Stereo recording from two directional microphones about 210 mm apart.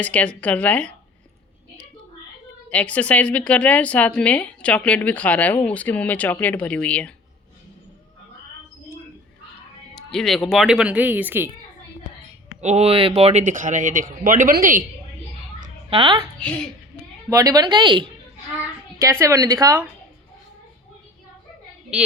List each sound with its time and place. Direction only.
0.0 s a woman's voice: 5° left (ahead or behind)
2.6 s a woman's voice: 5° left (ahead or behind)
9.9 s speech: centre (ahead or behind)
12.6 s speech: 30° right (ahead or behind)
15.9 s a woman's voice: 25° right (ahead or behind)
17.2 s a woman's voice: 15° right (ahead or behind)
18.6 s a sound: 15° right (ahead or behind)
19.2 s speech: 15° right (ahead or behind)